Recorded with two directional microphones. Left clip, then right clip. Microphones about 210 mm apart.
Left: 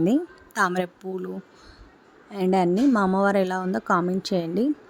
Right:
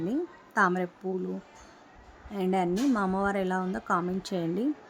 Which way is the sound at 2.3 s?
25° left (ahead or behind).